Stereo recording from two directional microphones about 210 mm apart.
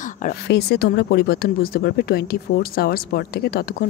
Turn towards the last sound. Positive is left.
turn(degrees=45)  # may be behind; listen again after turning